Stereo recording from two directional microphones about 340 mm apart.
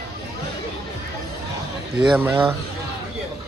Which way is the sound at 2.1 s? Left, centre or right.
Centre.